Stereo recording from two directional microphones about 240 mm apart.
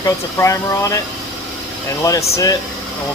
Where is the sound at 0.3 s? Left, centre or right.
Centre.